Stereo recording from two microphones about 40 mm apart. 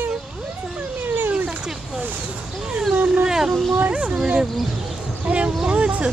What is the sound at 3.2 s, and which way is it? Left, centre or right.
Speech, centre.